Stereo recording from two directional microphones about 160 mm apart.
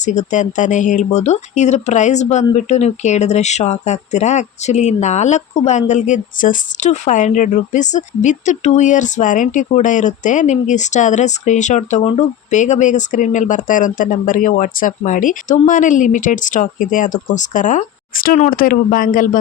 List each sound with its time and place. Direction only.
0.0 s speech: 50° left (ahead or behind)